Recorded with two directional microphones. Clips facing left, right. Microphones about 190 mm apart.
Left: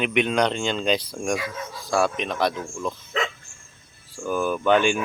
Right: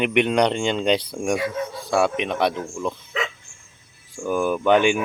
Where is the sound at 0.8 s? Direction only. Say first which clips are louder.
Right 3 dB; 65° right (ahead or behind).